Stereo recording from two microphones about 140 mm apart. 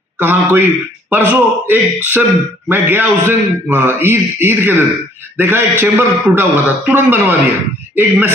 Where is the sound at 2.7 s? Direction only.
15° right (ahead or behind).